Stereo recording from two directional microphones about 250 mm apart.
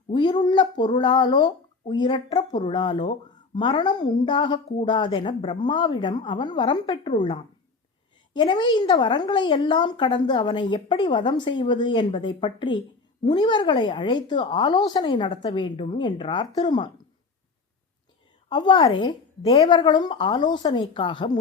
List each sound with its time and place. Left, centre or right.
0.1 s a woman's voice: centre
18.4 s speech: centre